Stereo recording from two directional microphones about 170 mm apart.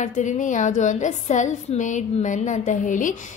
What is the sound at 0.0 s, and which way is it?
A woman's voice, 45° left (ahead or behind).